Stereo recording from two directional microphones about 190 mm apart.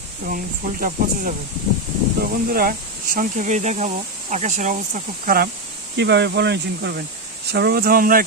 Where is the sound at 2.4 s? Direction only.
50° right (ahead or behind).